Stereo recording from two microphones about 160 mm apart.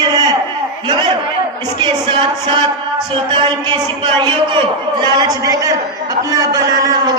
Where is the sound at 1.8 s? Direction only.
30° right (ahead or behind).